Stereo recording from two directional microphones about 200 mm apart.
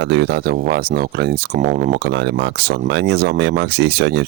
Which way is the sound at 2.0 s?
60° right (ahead or behind).